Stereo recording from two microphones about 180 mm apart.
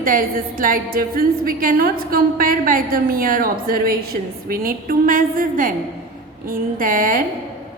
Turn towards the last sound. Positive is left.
turn(degrees=-50)  # may be behind; listen again after turning